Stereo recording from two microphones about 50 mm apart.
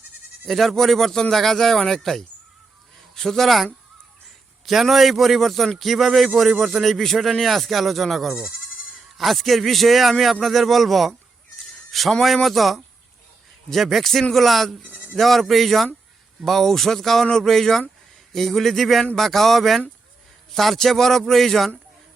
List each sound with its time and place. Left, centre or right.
0.4 s a man's voice: centre
8.3 s speech: centre
9.0 s a man's voice: centre
14.8 s bleat: right
15.1 s a man's voice: centre